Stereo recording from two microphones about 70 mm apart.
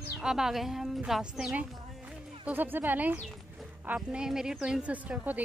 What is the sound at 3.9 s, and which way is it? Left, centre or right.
A woman's voice, centre.